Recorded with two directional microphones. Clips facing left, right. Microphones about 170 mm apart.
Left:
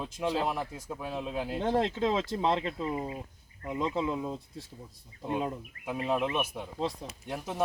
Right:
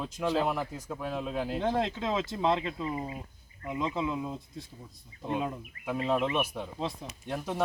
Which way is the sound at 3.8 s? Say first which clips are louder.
Left 1 dB; 35° left (ahead or behind).